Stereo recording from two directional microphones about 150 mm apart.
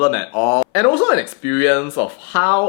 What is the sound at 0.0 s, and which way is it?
Speech, 15° left (ahead or behind).